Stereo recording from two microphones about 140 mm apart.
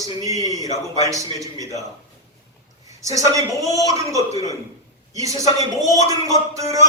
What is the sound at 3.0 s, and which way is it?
A man's voice, 25° right (ahead or behind).